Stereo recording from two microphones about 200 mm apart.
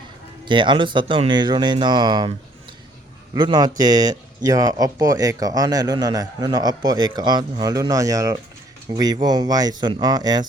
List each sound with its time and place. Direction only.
0.4 s speech: 25° right (ahead or behind)
3.3 s speech: 20° right (ahead or behind)